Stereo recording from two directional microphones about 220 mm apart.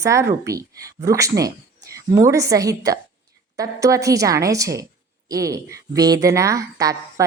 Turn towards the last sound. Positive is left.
turn(degrees=-15)  # may be behind; listen again after turning